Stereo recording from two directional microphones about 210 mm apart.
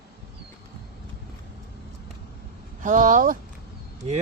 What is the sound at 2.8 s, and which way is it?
Speech, 40° right (ahead or behind).